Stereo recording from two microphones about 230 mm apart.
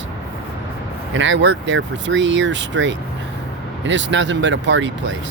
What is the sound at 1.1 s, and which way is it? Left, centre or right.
Speech, right.